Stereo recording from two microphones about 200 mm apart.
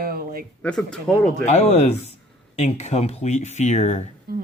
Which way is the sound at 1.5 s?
35° left (ahead or behind).